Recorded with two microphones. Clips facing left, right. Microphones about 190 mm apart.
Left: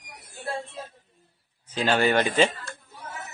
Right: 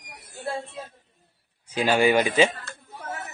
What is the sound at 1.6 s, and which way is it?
Speech, 10° right (ahead or behind).